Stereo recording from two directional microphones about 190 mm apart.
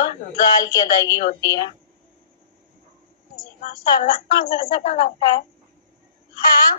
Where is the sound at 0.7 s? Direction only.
20° left (ahead or behind).